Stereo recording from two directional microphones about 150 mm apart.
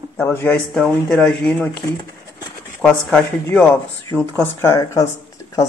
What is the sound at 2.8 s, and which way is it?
Speech, 10° left (ahead or behind).